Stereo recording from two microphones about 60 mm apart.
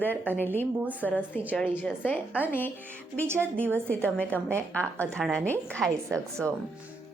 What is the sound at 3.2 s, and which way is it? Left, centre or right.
Speech, right.